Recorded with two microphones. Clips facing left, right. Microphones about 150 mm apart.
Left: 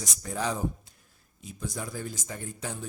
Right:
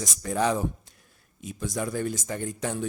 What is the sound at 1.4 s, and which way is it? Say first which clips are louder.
Speech: right 6 dB; 85° right.